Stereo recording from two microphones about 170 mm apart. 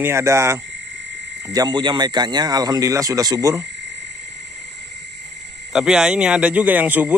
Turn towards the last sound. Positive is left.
turn(degrees=-10)  # may be behind; listen again after turning